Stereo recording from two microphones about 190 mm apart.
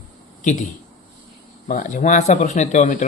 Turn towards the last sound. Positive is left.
turn(degrees=40)  # may be behind; listen again after turning